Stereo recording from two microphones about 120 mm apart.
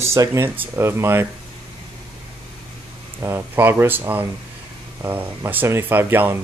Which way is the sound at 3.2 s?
20° right (ahead or behind).